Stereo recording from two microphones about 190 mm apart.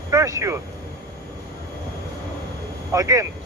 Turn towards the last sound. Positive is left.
turn(degrees=-15)  # may be behind; listen again after turning